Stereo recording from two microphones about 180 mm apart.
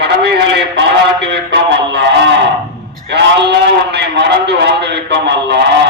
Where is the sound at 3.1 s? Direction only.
70° right (ahead or behind).